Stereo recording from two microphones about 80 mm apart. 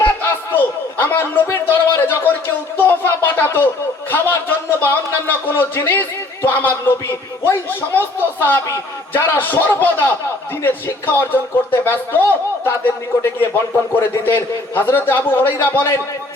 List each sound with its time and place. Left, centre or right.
0.2 s a sound: left
2.7 s a man's voice: left
13.2 s a man's voice: left